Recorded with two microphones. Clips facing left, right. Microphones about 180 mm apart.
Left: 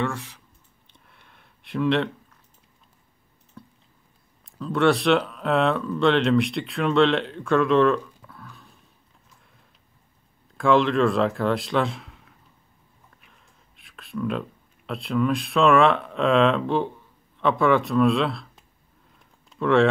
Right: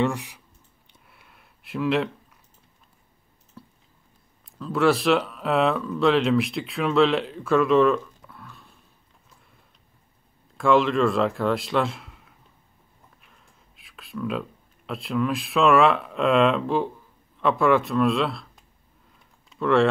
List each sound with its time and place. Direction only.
0.0 s speech: 15° right (ahead or behind)
0.8 s a sound: 5° right (ahead or behind)
3.6 s a sound: 5° right (ahead or behind)
4.5 s speech: centre (ahead or behind)
10.6 s a man's voice: centre (ahead or behind)
19.5 s speech: centre (ahead or behind)